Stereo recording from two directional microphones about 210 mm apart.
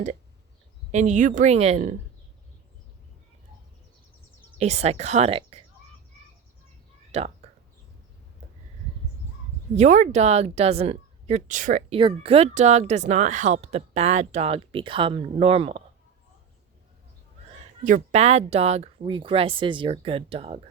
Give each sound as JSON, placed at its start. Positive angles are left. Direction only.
{"t": 0.9, "sound": "speech", "side_deg": -35}
{"t": 4.5, "sound": "speech", "side_deg": -30}
{"t": 7.1, "sound": "speech", "side_deg": -30}
{"t": 9.7, "sound": "speech", "side_deg": -35}
{"t": 11.9, "sound": "speech", "side_deg": -25}
{"t": 17.8, "sound": "speech", "side_deg": -35}